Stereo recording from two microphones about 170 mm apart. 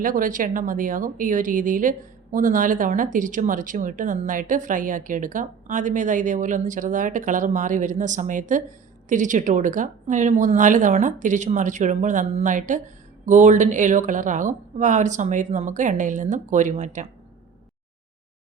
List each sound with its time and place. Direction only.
0.0 s a woman's voice: 55° right (ahead or behind)